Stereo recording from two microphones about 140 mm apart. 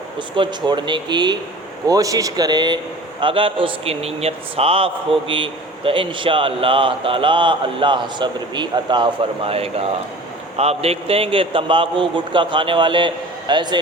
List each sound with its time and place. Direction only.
0.2 s a man's voice: 35° right (ahead or behind)